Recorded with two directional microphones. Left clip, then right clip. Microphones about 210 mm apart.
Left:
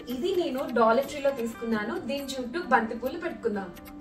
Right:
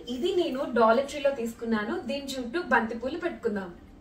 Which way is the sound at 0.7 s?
5° left (ahead or behind).